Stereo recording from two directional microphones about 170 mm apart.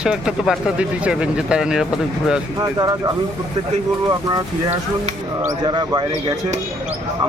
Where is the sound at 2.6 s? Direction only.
25° right (ahead or behind).